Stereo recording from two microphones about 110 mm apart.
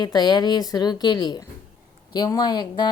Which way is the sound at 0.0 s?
40° left (ahead or behind).